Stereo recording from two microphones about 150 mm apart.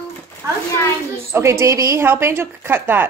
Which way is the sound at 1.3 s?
15° right (ahead or behind).